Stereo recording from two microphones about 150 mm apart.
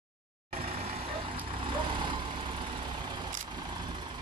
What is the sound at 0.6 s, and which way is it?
Vehicle, 40° right (ahead or behind).